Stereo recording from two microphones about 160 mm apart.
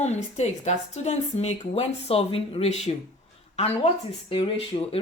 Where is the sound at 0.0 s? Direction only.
45° left (ahead or behind).